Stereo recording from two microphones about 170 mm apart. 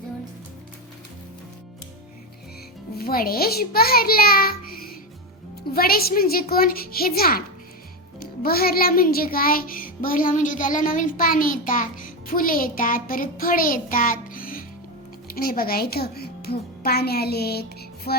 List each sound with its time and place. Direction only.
3.0 s music: 60° left (ahead or behind)
15.3 s speech: 60° left (ahead or behind)